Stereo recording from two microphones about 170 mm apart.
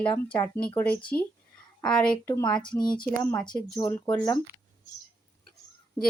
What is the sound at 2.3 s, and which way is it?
Speech, 20° left (ahead or behind).